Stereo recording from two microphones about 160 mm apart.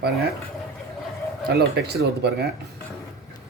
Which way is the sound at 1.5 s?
90° right.